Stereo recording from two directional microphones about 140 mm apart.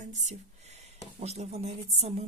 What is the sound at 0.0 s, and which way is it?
A woman's voice, 55° right (ahead or behind).